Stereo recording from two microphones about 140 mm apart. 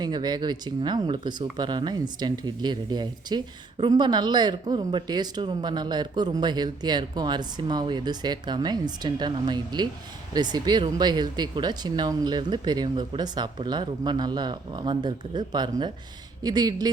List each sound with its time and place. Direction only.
0.0 s speech: 30° right (ahead or behind)